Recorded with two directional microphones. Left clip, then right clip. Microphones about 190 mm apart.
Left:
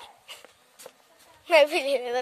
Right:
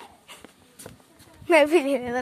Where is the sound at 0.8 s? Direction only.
30° right (ahead or behind).